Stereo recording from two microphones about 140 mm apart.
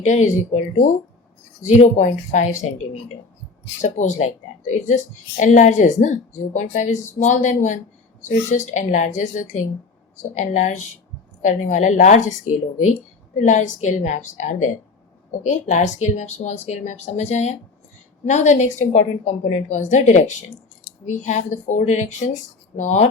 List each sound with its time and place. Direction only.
0.0 s speech: 60° left (ahead or behind)
3.8 s speech: 60° left (ahead or behind)
13.4 s speech: 60° left (ahead or behind)